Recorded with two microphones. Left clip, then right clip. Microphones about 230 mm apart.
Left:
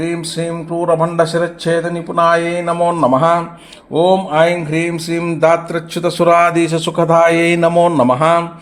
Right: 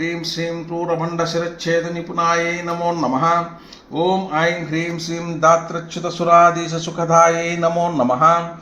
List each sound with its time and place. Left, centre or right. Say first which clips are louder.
1.1 s speech: left 6 dB; left